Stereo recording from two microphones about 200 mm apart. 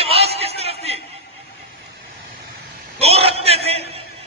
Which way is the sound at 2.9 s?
30° right (ahead or behind).